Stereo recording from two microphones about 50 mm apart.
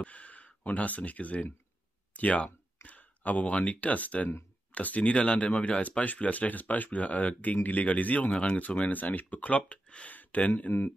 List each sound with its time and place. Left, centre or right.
0.0 s speech: left